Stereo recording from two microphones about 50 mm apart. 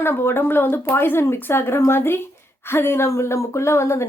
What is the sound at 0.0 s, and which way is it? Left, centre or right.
A woman's voice, left.